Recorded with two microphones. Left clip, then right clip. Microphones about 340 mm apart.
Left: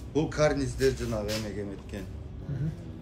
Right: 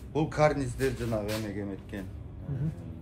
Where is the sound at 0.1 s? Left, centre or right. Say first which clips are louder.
Even; centre.